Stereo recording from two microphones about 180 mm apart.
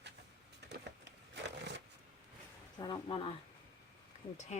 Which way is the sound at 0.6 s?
70° right (ahead or behind).